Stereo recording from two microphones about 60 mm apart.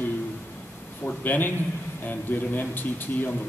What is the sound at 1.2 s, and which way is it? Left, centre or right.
A man's voice, left.